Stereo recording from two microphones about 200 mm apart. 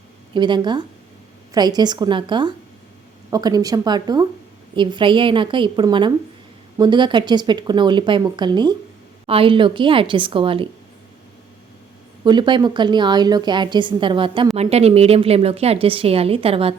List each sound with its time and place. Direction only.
0.3 s a woman's voice: 25° right (ahead or behind)
12.2 s a woman's voice: 20° right (ahead or behind)